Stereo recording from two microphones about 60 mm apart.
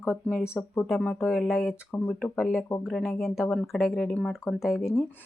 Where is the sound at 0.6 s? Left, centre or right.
Centre.